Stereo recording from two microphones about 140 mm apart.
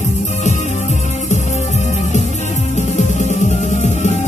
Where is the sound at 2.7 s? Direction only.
55° left (ahead or behind).